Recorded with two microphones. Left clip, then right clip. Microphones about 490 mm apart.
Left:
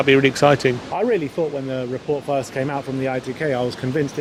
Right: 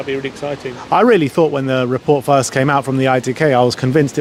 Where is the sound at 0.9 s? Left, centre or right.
Right.